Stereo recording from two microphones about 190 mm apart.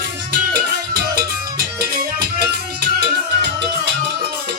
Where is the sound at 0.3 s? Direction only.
55° right (ahead or behind).